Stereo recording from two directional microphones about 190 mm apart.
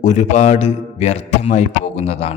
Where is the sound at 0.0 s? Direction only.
40° left (ahead or behind).